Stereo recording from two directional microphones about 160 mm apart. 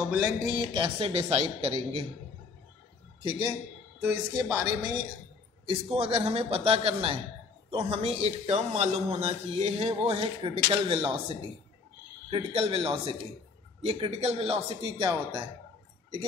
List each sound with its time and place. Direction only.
0.1 s speech: 15° right (ahead or behind)
0.7 s a man's voice: 30° right (ahead or behind)
3.2 s a man's voice: 25° right (ahead or behind)
4.0 s speech: 5° right (ahead or behind)
4.6 s speech: 25° right (ahead or behind)
5.7 s a man's voice: 35° right (ahead or behind)